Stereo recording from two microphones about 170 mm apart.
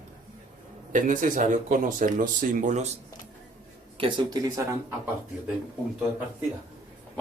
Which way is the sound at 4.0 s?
30° right (ahead or behind).